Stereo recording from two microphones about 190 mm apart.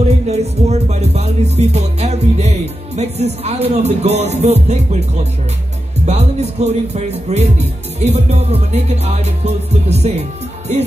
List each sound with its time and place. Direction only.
0.3 s music: 35° right (ahead or behind)
3.0 s speech: 35° right (ahead or behind)
6.0 s speech: 35° right (ahead or behind)